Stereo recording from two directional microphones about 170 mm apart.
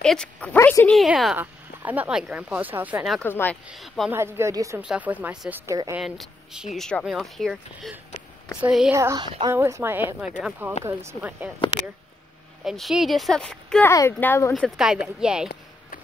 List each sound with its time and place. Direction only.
0.0 s speech: 5° left (ahead or behind)
3.2 s speech: 10° left (ahead or behind)
3.6 s speech: centre (ahead or behind)
4.1 s a woman's voice: 15° right (ahead or behind)
5.9 s speech: centre (ahead or behind)
8.9 s a woman's voice: 20° right (ahead or behind)
12.6 s speech: centre (ahead or behind)
13.8 s speech: 15° left (ahead or behind)
14.5 s speech: centre (ahead or behind)